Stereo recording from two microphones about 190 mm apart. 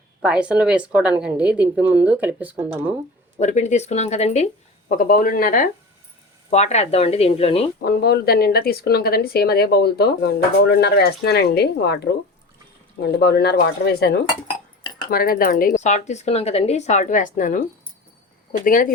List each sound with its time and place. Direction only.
0.2 s a woman's voice: 5° right (ahead or behind)
3.3 s speech: 40° left (ahead or behind)
4.9 s speech: 45° left (ahead or behind)
6.5 s speech: 35° left (ahead or behind)
7.9 s speech: 55° left (ahead or behind)
13.0 s speech: 60° left (ahead or behind)